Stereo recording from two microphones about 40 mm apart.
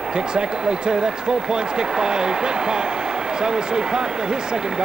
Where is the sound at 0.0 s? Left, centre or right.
Right.